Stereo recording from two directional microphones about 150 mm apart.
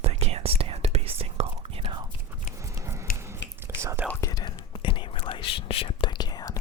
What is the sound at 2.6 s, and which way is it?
Scissors, 20° right (ahead or behind).